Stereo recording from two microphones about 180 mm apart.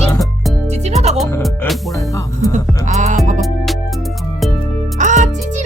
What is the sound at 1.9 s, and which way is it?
Speech, 20° left (ahead or behind).